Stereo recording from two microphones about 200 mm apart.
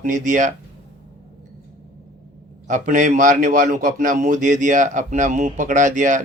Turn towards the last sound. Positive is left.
turn(degrees=-40)  # may be behind; listen again after turning